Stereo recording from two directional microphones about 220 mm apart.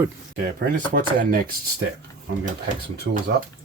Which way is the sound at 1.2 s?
40° right (ahead or behind).